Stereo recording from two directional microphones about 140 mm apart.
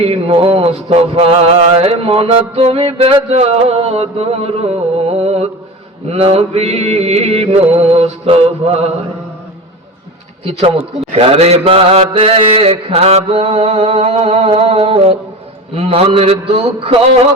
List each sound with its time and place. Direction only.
0.0 s mantra: 45° right (ahead or behind)
11.1 s mantra: 45° right (ahead or behind)